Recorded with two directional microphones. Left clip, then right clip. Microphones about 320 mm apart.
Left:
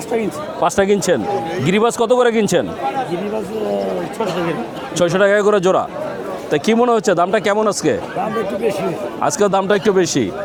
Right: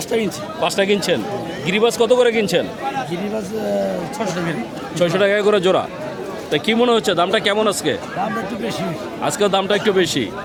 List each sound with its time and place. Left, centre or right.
0.6 s a man's voice: left
4.9 s speech: left
9.2 s speech: left